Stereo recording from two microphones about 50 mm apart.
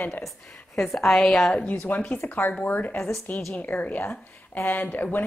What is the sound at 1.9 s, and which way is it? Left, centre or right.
A woman's voice, left.